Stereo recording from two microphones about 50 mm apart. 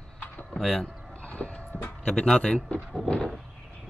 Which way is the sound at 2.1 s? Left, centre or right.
Centre.